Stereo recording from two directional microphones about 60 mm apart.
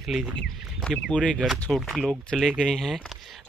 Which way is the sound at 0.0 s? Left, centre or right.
Centre.